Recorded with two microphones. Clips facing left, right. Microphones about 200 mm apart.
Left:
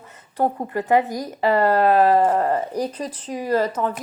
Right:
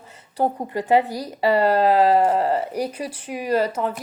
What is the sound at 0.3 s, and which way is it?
Speech, 15° right (ahead or behind).